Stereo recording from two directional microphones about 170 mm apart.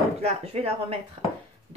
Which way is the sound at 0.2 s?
35° right (ahead or behind).